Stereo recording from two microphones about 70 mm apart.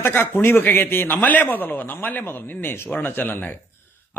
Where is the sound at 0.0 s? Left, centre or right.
Left.